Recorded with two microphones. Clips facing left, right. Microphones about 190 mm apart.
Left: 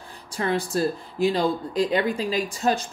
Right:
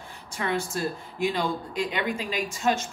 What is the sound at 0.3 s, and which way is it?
Speech, 35° left (ahead or behind).